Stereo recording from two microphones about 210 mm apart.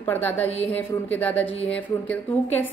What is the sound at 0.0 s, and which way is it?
A woman's voice, 10° left (ahead or behind).